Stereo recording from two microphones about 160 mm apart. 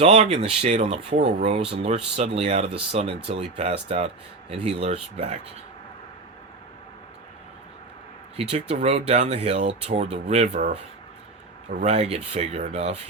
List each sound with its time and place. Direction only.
0.0 s speech: 40° right (ahead or behind)
8.4 s speech: 40° right (ahead or behind)